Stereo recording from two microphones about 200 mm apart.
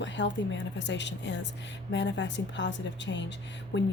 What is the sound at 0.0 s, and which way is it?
A woman's voice, 65° left (ahead or behind).